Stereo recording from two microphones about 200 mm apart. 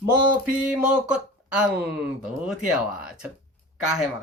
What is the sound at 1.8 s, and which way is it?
Speech, 55° right (ahead or behind).